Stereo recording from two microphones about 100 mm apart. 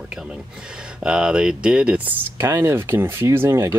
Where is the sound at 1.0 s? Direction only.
10° right (ahead or behind).